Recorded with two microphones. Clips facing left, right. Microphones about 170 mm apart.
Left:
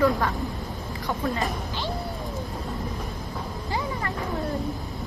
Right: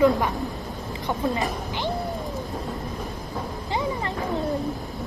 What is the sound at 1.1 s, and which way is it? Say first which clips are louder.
Music: right 2 dB; 20° right (ahead or behind).